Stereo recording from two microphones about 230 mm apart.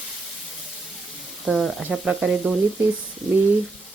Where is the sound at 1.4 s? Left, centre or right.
Centre.